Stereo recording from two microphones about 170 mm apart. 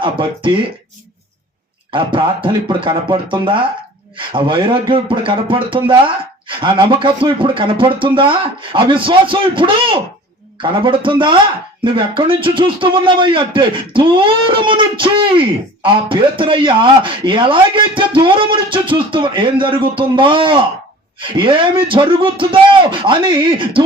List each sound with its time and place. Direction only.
0.0 s a man's voice: 30° right (ahead or behind)
1.9 s a man's voice: 30° right (ahead or behind)